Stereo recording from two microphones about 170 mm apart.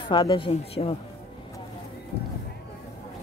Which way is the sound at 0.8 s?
35° left (ahead or behind).